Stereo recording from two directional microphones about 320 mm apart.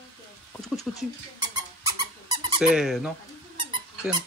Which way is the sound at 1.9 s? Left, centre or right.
Centre.